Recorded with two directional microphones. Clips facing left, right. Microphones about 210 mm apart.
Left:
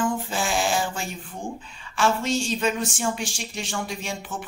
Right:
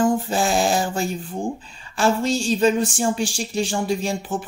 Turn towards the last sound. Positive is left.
turn(degrees=-35)  # may be behind; listen again after turning